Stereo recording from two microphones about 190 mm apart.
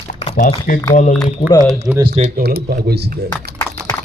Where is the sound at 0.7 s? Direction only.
45° left (ahead or behind).